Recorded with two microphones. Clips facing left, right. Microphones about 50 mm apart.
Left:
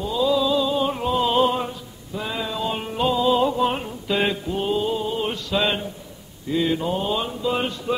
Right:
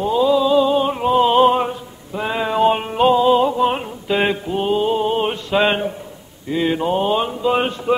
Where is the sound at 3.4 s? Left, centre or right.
Centre; by 5.9 s right.